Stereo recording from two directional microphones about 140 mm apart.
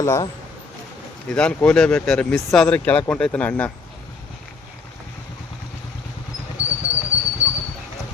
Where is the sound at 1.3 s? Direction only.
5° left (ahead or behind).